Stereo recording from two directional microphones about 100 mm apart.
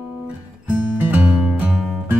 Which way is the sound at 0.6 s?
20° right (ahead or behind).